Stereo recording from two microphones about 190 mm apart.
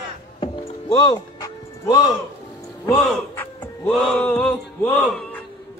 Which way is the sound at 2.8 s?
10° left (ahead or behind).